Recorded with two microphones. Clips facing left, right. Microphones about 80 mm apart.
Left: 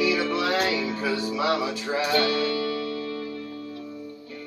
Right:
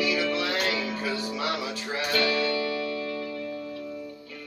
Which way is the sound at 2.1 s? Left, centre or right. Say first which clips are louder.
Left 1 dB; left.